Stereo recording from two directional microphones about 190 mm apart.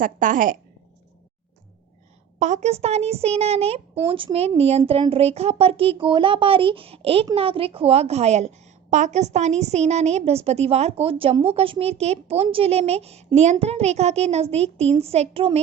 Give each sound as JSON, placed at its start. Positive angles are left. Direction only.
{"t": 0.0, "sound": "a woman's voice", "side_deg": -45}
{"t": 2.4, "sound": "a woman's voice", "side_deg": -40}